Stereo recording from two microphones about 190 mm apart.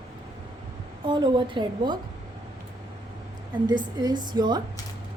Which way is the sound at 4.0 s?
20° right (ahead or behind).